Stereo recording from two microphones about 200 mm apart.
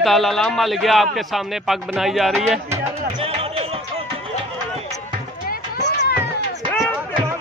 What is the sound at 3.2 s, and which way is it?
Music, 30° right (ahead or behind).